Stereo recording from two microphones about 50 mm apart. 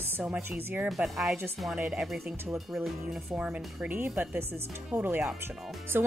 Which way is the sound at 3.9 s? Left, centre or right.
Right.